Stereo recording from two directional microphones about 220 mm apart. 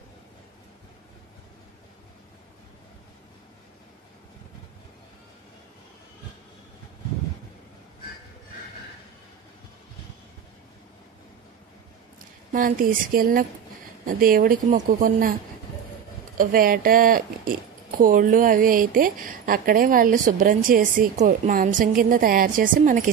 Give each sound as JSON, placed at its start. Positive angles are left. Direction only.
{"t": 12.5, "sound": "speech", "side_deg": -40}
{"t": 16.3, "sound": "speech", "side_deg": -40}